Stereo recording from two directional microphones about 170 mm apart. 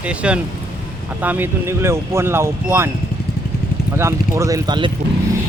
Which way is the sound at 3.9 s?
15° right (ahead or behind).